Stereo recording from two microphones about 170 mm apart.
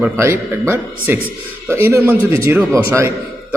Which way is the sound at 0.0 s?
15° right (ahead or behind).